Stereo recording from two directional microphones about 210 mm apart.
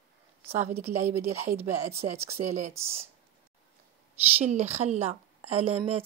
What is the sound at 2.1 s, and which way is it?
Speech, 30° right (ahead or behind).